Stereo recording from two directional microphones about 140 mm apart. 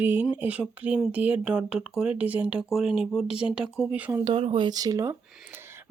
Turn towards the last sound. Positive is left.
turn(degrees=-25)  # may be behind; listen again after turning